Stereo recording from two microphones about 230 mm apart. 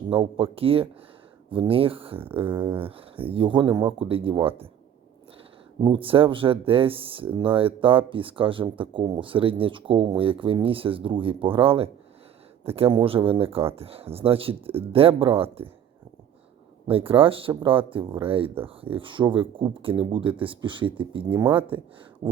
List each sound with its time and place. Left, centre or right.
0.1 s speech: right
5.8 s speech: right
16.8 s speech: right
22.2 s a sound: centre